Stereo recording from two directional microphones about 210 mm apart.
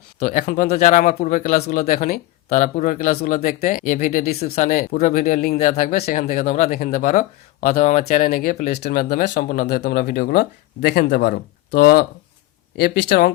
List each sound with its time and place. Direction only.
0.2 s speech: 40° left (ahead or behind)